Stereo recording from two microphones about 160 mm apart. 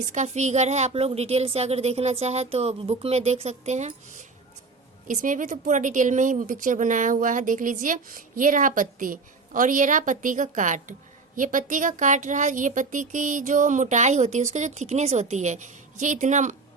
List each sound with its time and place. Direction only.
0.0 s a woman's voice: 50° right (ahead or behind)